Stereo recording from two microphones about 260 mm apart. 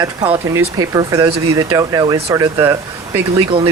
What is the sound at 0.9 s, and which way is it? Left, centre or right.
Speech, centre.